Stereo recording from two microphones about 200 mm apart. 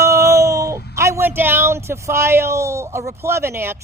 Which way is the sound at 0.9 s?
15° right (ahead or behind).